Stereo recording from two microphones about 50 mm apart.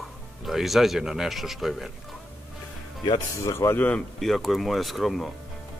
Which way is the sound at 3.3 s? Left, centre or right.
Left.